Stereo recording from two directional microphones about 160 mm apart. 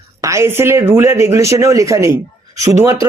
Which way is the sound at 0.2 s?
20° right (ahead or behind).